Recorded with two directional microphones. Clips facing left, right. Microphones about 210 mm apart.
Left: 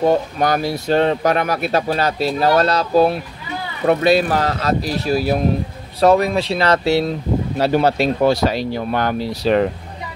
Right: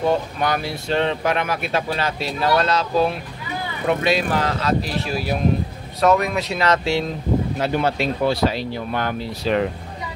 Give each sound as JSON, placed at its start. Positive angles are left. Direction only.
{"t": 0.0, "sound": "speech", "side_deg": 40}